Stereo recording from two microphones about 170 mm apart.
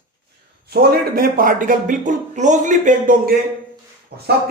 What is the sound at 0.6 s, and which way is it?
A man's voice, 65° right (ahead or behind).